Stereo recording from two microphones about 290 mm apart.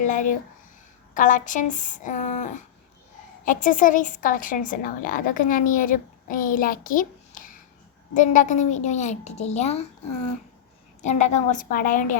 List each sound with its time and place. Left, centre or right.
0.0 s a woman's voice: left
11.2 s a woman's voice: left